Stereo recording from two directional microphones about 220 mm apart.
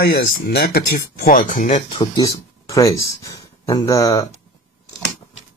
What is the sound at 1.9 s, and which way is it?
Speech, 20° left (ahead or behind).